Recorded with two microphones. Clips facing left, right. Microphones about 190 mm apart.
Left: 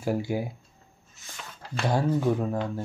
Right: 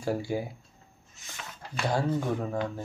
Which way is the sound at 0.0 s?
10° left (ahead or behind).